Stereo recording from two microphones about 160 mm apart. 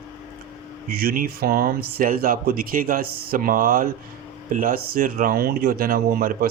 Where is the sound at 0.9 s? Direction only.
70° right (ahead or behind).